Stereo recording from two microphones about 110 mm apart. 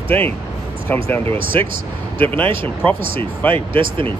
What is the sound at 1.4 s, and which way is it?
Speech, 50° right (ahead or behind).